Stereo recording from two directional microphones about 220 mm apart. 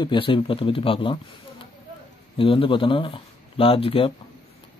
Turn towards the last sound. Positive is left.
turn(degrees=25)  # may be behind; listen again after turning